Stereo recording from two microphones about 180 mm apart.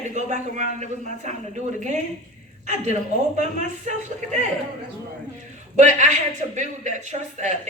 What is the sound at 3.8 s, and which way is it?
Speech, 40° right (ahead or behind).